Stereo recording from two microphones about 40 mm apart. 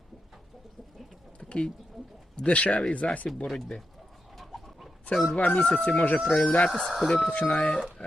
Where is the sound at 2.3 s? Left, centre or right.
Left.